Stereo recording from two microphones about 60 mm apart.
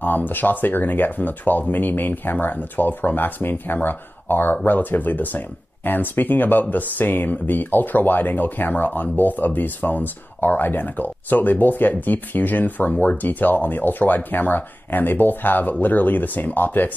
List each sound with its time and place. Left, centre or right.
0.0 s speech: left